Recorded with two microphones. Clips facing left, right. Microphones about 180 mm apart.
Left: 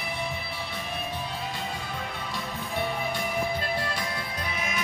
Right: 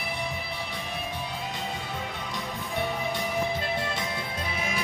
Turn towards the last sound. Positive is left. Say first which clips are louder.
# right 1 dB
turn(degrees=-30)  # may be behind; listen again after turning